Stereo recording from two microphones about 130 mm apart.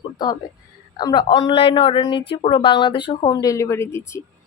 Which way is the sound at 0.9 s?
35° left (ahead or behind).